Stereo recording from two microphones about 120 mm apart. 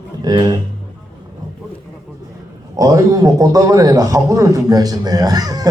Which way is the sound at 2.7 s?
30° right (ahead or behind).